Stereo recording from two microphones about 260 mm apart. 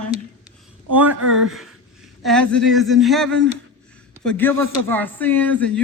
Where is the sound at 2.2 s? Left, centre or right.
Centre.